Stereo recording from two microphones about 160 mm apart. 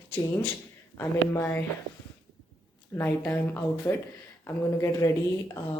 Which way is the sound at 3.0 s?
10° left (ahead or behind).